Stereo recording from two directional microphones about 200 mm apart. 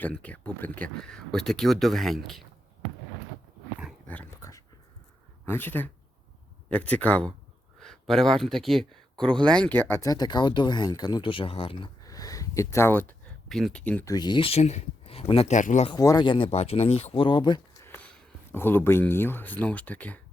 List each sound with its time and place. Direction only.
0.0 s speech: 5° left (ahead or behind)
4.0 s dog: 10° left (ahead or behind)
5.5 s speech: 10° left (ahead or behind); by 11.9 s 30° left (ahead or behind)
12.0 s speech: 15° left (ahead or behind)
14.1 s speech: 20° left (ahead or behind); by 15.9 s 40° left (ahead or behind)
15.9 s speech: 20° left (ahead or behind)
17.9 s speech: 10° left (ahead or behind)